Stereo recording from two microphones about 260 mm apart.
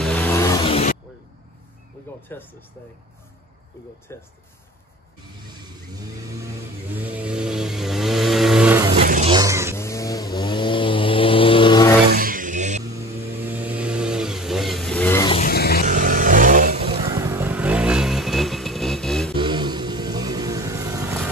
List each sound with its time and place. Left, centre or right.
0.0 s a sound: centre
2.3 s speech: centre
4.1 s speech: centre
7.0 s vehicle: centre
8.9 s vehicle: right
9.3 s vehicle: centre
9.8 s vehicle: centre
12.1 s a sound: right
13.5 s vehicle: centre
15.3 s vehicle: left
15.9 s vehicle: right
17.0 s motorcycle: centre
19.3 s vehicle: centre